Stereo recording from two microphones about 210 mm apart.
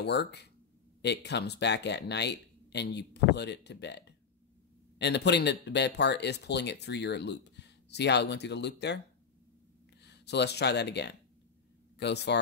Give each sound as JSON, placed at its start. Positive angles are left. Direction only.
{"t": 0.0, "sound": "speech", "side_deg": 50}
{"t": 10.0, "sound": "speech", "side_deg": 55}